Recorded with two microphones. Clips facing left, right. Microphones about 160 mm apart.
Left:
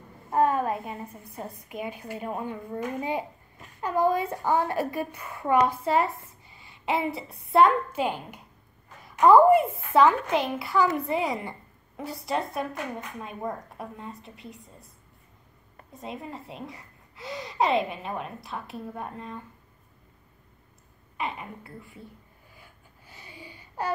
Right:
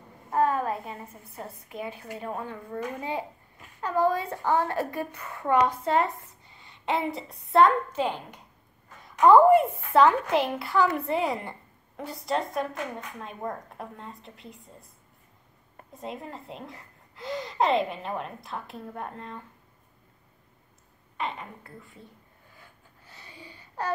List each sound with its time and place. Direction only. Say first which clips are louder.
0.3 s a woman's voice: left 1 dB; 20° left (ahead or behind); by 14.6 s centre (ahead or behind)
16.0 s a child's voice: even; centre (ahead or behind)
21.2 s a woman's voice: even; 10° left (ahead or behind)
22.6 s a sound: even; 10° left (ahead or behind)